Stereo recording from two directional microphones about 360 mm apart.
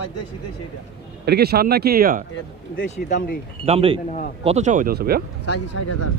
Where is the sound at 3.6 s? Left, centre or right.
Centre.